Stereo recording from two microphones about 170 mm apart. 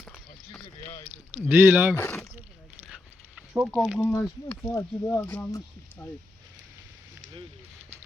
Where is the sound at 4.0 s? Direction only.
15° left (ahead or behind).